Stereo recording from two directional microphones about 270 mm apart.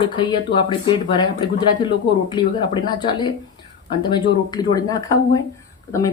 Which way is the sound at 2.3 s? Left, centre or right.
Centre.